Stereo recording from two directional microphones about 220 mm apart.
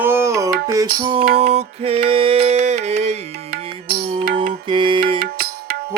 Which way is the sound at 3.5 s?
45° right (ahead or behind).